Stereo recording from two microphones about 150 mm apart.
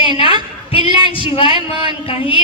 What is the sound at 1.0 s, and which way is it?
Speech, 35° right (ahead or behind).